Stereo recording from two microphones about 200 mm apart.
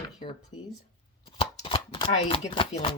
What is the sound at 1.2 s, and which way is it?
Shuffling cards, 25° left (ahead or behind).